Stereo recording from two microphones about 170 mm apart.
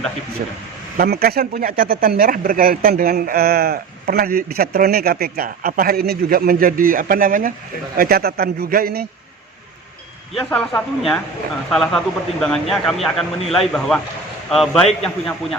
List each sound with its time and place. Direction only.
0.9 s speech: 65° right (ahead or behind)
10.5 s a man's voice: 5° left (ahead or behind)